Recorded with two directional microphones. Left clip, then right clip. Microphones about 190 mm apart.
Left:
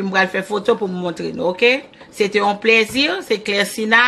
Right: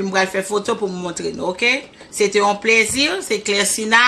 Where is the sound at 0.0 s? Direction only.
35° left (ahead or behind).